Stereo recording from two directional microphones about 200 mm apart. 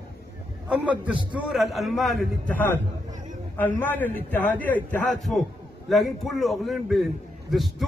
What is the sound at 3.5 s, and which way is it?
A man's voice, 10° left (ahead or behind).